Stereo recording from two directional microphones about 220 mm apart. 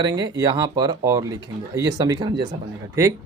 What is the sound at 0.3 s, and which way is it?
Speech, 15° right (ahead or behind).